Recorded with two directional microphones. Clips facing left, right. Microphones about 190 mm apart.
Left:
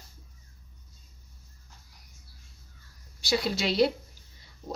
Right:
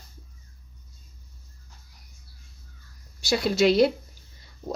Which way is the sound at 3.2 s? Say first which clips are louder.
Right 7 dB; 45° right (ahead or behind).